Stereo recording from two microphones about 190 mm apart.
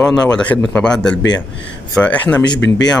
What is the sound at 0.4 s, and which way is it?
Speech, 5° left (ahead or behind).